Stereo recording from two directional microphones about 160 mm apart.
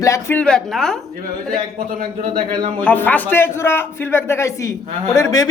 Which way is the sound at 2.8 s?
10° left (ahead or behind).